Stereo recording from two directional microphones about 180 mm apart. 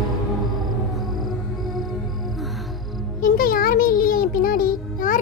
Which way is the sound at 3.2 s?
50° left (ahead or behind).